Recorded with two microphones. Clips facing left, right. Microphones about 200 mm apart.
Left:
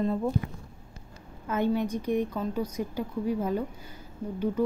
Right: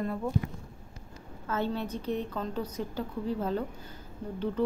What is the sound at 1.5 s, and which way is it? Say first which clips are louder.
A woman's voice: left 5 dB; 15° left (ahead or behind).